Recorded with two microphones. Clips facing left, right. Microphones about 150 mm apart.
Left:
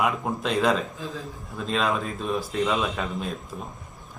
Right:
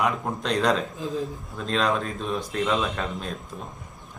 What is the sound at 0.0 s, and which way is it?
Speech, 5° left (ahead or behind).